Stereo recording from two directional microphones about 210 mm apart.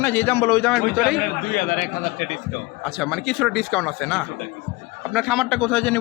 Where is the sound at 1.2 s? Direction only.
40° left (ahead or behind).